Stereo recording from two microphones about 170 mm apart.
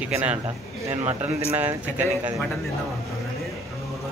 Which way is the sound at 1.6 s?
10° right (ahead or behind).